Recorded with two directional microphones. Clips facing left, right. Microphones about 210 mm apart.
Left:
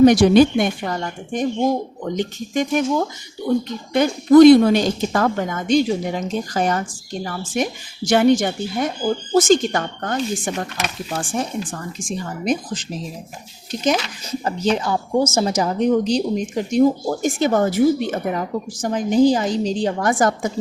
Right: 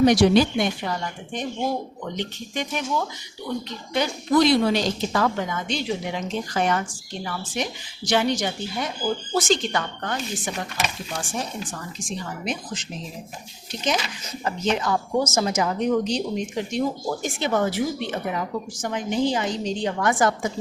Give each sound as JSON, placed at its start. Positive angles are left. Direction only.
{"t": 0.0, "sound": "a woman's voice", "side_deg": 50}
{"t": 14.4, "sound": "speech", "side_deg": 35}